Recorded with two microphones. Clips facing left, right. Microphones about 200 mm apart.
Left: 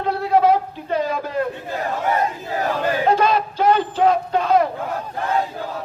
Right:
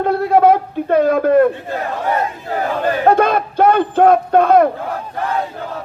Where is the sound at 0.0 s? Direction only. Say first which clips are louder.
Right 5 dB; 55° right (ahead or behind).